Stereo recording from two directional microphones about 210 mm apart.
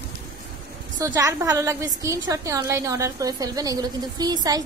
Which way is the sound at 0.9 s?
15° right (ahead or behind).